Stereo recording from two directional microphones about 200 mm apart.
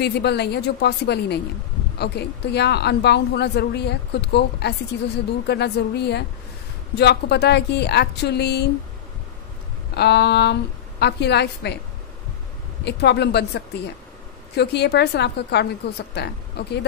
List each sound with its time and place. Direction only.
0.0 s a woman's voice: 55° left (ahead or behind)
9.9 s a woman's voice: 55° left (ahead or behind)
12.8 s a woman's voice: 55° left (ahead or behind)
14.5 s a woman's voice: 55° left (ahead or behind)